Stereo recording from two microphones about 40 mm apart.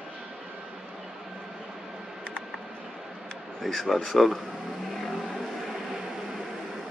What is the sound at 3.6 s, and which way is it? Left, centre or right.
Speech, centre.